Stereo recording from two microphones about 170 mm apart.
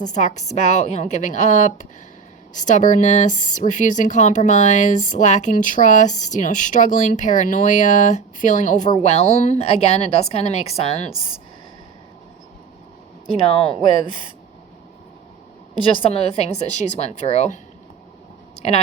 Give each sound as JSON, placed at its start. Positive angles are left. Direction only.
{"t": 0.0, "sound": "a woman's voice", "side_deg": 45}
{"t": 13.5, "sound": "a woman's voice", "side_deg": 35}
{"t": 16.0, "sound": "a woman's voice", "side_deg": 35}